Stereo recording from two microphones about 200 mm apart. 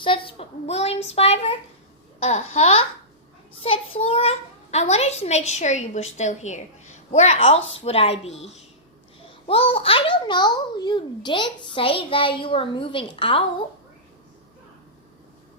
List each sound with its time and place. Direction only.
0.0 s a child's voice: 25° left (ahead or behind)
9.5 s a child's voice: 30° left (ahead or behind)